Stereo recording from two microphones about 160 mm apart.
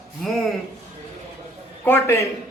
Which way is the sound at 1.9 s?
15° left (ahead or behind).